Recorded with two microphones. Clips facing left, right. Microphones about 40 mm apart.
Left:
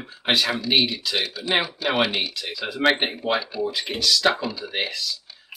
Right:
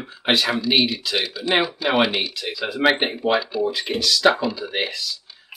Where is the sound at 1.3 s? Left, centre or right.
Right.